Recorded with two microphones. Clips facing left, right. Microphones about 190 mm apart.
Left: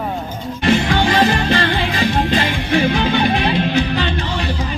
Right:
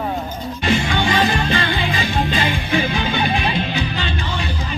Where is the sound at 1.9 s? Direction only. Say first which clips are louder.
Left 4 dB; 70° left (ahead or behind).